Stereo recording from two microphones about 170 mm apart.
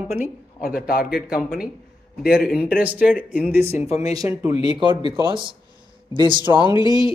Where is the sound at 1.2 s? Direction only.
5° right (ahead or behind).